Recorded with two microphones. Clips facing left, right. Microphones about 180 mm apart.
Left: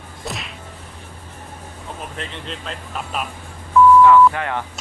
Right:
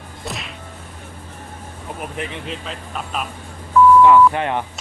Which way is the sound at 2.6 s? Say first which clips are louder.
Even; centre (ahead or behind).